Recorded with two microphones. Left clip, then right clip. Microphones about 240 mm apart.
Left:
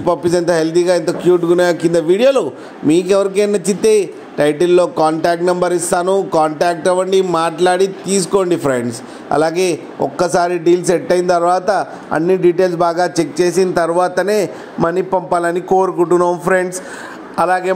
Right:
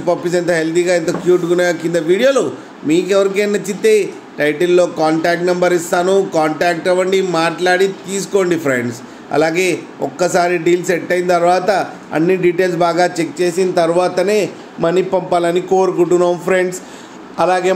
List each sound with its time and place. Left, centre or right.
0.0 s a man's voice: left